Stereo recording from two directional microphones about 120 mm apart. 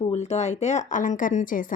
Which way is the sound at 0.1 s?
70° left (ahead or behind).